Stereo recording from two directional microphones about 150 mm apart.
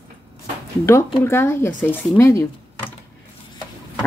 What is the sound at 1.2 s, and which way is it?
Speech, 15° left (ahead or behind).